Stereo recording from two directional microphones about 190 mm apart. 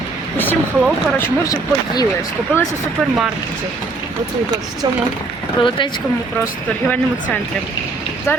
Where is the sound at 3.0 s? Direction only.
Centre (ahead or behind).